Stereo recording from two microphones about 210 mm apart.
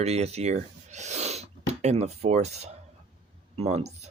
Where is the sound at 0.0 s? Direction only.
30° right (ahead or behind).